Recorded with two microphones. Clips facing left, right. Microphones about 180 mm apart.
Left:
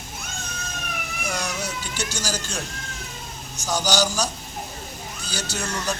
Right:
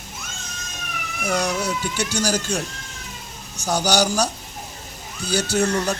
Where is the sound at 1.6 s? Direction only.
60° right (ahead or behind).